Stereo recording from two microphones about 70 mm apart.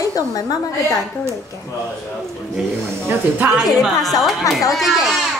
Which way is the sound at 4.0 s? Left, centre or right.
Left.